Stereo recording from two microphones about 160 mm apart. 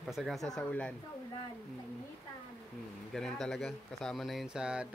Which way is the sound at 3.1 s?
5° left (ahead or behind).